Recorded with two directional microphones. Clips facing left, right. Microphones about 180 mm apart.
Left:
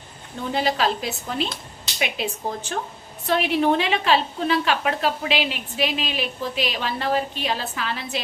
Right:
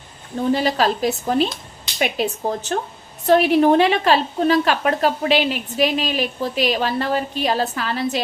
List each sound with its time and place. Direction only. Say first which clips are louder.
0.5 s a woman's voice: right 2 dB; 45° right (ahead or behind)